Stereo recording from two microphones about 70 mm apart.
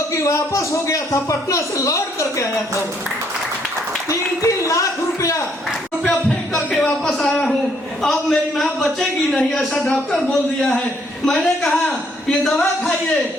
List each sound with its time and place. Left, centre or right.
0.1 s a man's voice: left
4.1 s a man's voice: left
6.1 s a sound: centre
11.3 s a man's voice: centre